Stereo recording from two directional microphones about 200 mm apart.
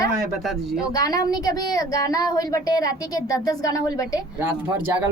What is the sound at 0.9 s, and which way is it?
Speech, 20° left (ahead or behind).